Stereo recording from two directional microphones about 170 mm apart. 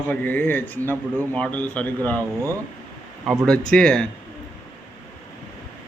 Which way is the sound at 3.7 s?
5° left (ahead or behind).